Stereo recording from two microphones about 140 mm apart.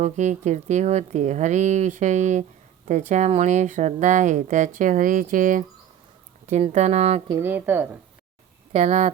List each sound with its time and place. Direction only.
0.0 s speech: 60° right (ahead or behind)
6.4 s speech: 55° right (ahead or behind)
7.3 s a woman's voice: 15° right (ahead or behind)
8.7 s speech: 55° right (ahead or behind)